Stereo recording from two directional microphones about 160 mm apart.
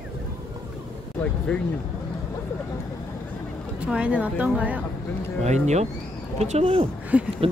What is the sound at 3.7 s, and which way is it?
Speech, 5° right (ahead or behind).